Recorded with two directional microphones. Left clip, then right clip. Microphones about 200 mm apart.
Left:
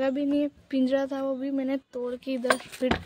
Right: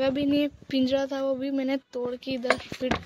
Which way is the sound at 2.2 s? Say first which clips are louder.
Left 1 dB; 5° left (ahead or behind).